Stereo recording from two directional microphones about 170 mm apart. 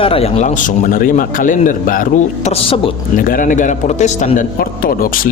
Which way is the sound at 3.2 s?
55° left (ahead or behind).